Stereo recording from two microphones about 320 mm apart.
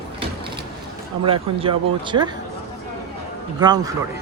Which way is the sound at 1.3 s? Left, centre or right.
Centre.